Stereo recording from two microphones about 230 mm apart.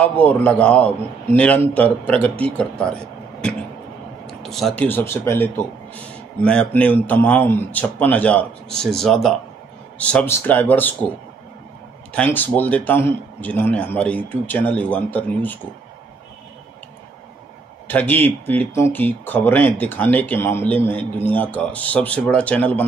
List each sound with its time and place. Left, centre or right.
0.0 s a man's voice: centre
4.3 s a man's voice: centre
12.1 s a man's voice: centre
17.8 s a man's voice: centre